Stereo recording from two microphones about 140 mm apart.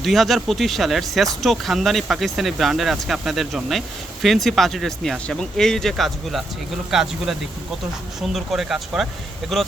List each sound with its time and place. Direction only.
0.0 s speech: centre (ahead or behind)